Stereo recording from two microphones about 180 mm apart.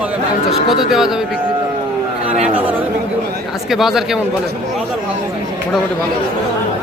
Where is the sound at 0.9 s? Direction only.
5° right (ahead or behind).